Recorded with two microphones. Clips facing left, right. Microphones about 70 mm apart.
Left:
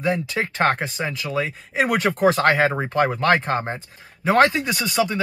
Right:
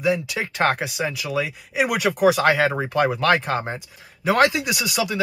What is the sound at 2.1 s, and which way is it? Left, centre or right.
Speech, centre.